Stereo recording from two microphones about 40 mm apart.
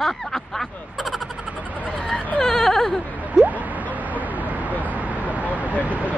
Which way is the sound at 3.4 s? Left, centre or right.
Centre.